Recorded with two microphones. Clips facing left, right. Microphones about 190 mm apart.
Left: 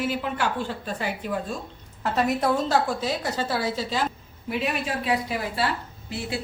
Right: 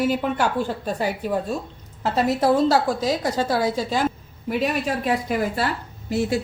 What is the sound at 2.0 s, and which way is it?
A woman's voice, 30° right (ahead or behind).